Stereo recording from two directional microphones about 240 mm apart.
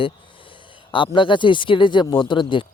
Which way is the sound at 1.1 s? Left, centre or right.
Centre.